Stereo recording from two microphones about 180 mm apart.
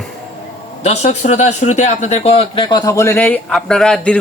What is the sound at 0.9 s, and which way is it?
Speech, 40° left (ahead or behind).